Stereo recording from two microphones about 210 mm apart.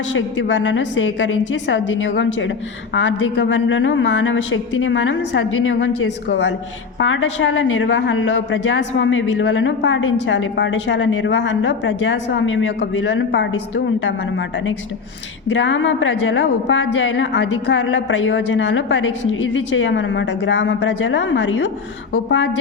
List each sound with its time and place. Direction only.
0.1 s a woman's voice: 65° left (ahead or behind)